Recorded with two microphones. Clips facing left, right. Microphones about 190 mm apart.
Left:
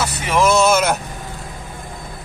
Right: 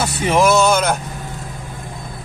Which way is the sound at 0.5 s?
Centre (ahead or behind).